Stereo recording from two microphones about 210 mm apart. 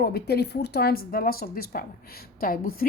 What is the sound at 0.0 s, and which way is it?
A woman's voice, 50° left (ahead or behind).